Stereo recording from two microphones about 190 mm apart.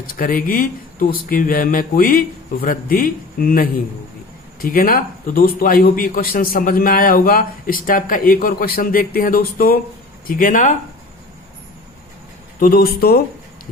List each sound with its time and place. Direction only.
0.2 s a man's voice: 45° left (ahead or behind)
12.5 s a man's voice: 50° left (ahead or behind)